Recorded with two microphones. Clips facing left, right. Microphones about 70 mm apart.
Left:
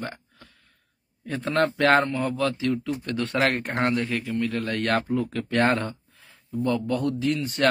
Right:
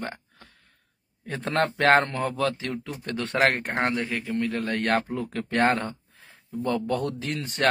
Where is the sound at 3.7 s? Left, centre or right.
Right.